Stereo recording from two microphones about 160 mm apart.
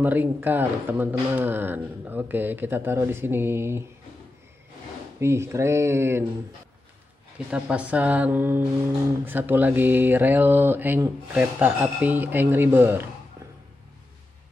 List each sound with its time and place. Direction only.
0.0 s speech: 10° right (ahead or behind)
5.2 s speech: 15° right (ahead or behind)
7.3 s speech: 5° right (ahead or behind)